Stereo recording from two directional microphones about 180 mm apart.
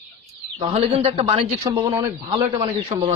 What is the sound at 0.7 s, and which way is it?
Speech, 35° right (ahead or behind).